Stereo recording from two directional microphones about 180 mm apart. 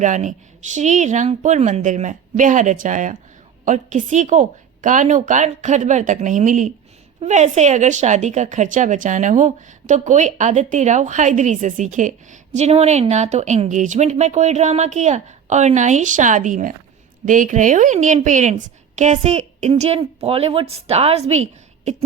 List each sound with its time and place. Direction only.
0.0 s a woman's voice: 45° right (ahead or behind)